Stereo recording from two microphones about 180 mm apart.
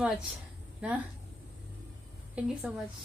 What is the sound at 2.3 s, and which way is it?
Speech, 5° right (ahead or behind).